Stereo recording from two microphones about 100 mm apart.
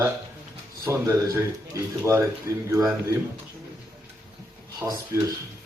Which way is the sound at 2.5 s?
30° right (ahead or behind).